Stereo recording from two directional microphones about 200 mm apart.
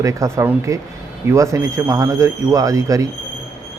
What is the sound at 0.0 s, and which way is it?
Speech, 15° right (ahead or behind).